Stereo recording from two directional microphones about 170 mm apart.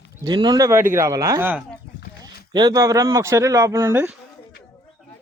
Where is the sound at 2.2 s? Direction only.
25° right (ahead or behind).